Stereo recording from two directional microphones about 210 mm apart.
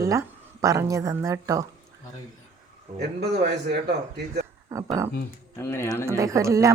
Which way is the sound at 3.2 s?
50° right (ahead or behind).